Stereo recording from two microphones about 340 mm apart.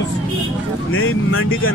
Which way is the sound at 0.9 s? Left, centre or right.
Left.